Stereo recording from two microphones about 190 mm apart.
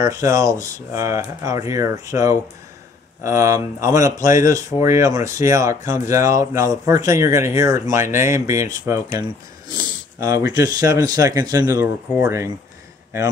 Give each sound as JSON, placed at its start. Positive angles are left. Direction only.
{"t": 0.0, "sound": "speech", "side_deg": -15}